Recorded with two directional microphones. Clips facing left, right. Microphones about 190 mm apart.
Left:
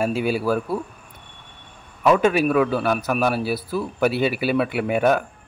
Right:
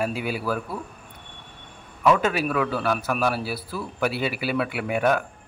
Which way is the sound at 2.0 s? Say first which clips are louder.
Left 4 dB; 20° left (ahead or behind).